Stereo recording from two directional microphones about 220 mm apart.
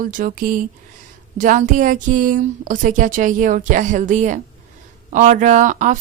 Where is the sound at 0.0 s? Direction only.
40° right (ahead or behind).